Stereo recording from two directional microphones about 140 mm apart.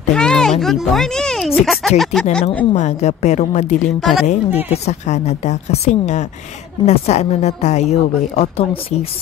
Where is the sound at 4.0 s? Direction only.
Centre (ahead or behind).